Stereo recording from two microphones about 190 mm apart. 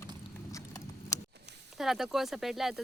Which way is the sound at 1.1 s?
15° left (ahead or behind).